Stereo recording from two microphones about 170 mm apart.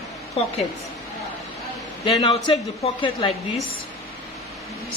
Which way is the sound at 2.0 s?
25° left (ahead or behind).